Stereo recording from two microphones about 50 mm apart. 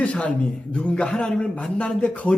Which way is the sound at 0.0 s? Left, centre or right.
Left.